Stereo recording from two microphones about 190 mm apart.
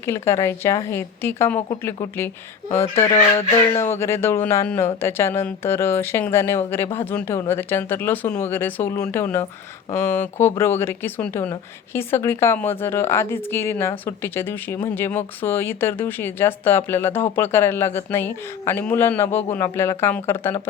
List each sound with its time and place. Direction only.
0.0 s speech: 15° left (ahead or behind)
3.1 s a sound: 25° left (ahead or behind)
3.8 s speech: 15° left (ahead or behind)